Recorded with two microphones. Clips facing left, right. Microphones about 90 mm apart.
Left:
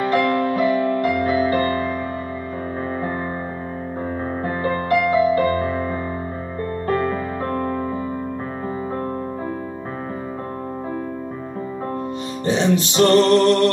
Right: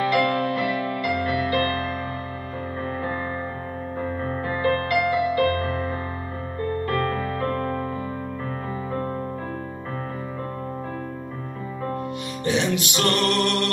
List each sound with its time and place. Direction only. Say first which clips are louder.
0.1 s music: left 3 dB; 35° left (ahead or behind)
4.5 s music: left 2 dB; 30° left (ahead or behind)
12.4 s music: left 5 dB; 30° left (ahead or behind)